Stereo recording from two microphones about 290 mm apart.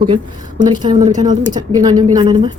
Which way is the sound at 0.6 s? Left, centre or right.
Centre.